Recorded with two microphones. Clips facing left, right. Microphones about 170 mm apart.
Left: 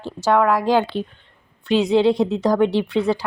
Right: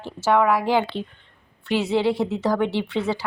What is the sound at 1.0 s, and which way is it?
Speech, 15° left (ahead or behind).